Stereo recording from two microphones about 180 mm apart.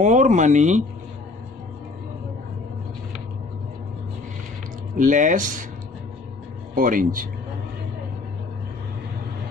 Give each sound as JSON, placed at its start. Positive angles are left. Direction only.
{"t": 0.0, "sound": "speech", "side_deg": -45}
{"t": 4.9, "sound": "speech", "side_deg": -45}
{"t": 6.7, "sound": "speech", "side_deg": -50}